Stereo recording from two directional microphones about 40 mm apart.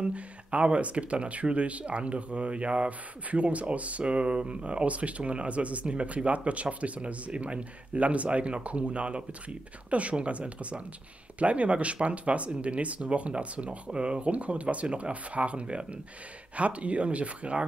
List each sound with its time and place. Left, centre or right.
0.0 s speech: right